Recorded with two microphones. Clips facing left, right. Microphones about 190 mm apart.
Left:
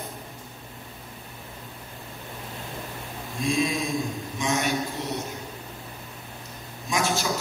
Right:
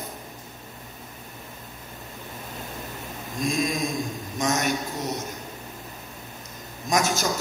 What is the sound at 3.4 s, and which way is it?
A man's voice, 45° right (ahead or behind).